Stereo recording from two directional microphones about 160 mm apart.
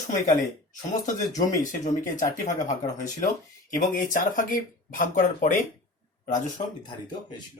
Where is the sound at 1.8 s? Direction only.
50° left (ahead or behind).